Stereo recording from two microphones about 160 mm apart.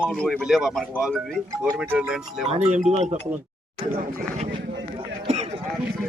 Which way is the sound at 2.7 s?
45° right (ahead or behind).